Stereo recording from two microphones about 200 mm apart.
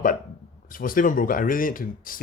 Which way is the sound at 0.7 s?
45° left (ahead or behind).